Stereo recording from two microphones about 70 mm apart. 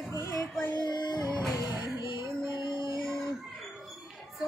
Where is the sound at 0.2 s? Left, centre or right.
Left.